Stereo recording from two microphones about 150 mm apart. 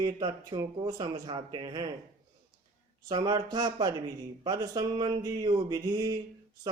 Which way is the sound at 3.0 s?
25° right (ahead or behind).